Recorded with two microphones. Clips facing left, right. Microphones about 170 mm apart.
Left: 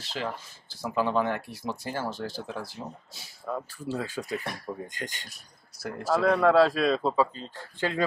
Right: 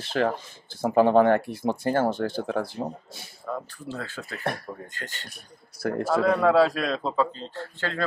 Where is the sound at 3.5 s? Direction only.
10° left (ahead or behind).